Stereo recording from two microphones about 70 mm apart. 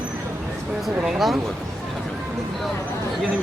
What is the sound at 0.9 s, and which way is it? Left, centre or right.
Speech, centre.